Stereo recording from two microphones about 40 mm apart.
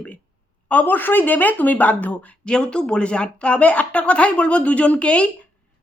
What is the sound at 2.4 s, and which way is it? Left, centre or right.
Speech, left.